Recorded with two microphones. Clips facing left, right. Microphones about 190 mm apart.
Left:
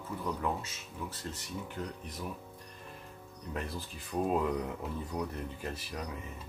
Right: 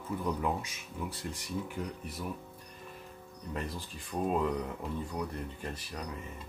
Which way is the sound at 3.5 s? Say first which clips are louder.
Even; centre (ahead or behind).